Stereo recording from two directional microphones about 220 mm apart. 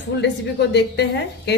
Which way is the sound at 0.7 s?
50° left (ahead or behind).